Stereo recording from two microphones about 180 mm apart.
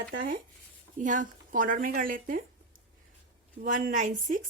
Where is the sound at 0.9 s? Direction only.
45° right (ahead or behind).